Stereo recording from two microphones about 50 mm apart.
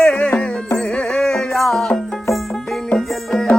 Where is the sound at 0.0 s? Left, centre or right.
Left; by 2.0 s centre.